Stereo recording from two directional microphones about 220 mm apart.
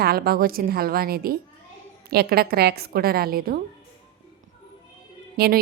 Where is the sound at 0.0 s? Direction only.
45° right (ahead or behind).